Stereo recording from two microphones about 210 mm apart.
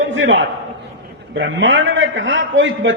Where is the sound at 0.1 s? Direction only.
65° right (ahead or behind).